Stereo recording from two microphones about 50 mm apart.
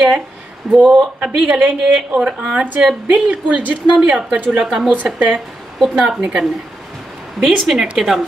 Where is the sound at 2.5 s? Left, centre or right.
Right.